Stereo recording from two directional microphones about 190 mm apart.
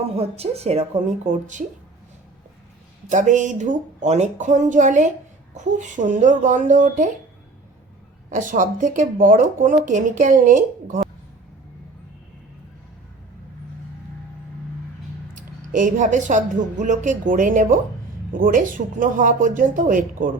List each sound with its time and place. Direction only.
0.0 s speech: 35° right (ahead or behind)
3.1 s speech: 40° right (ahead or behind)
8.3 s speech: 45° right (ahead or behind)
15.4 s speech: 45° right (ahead or behind)